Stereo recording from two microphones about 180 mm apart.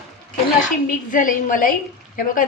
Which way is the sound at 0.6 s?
50° left (ahead or behind).